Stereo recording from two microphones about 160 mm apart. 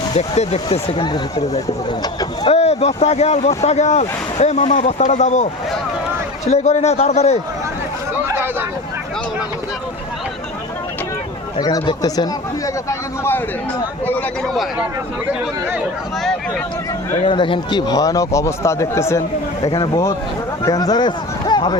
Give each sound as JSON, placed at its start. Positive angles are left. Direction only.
{"t": 0.1, "sound": "speech", "side_deg": 40}
{"t": 2.4, "sound": "speech", "side_deg": 40}
{"t": 11.5, "sound": "a man's voice", "side_deg": 25}
{"t": 14.4, "sound": "speech", "side_deg": 0}
{"t": 17.2, "sound": "a man's voice", "side_deg": 30}
{"t": 20.7, "sound": "speech", "side_deg": 25}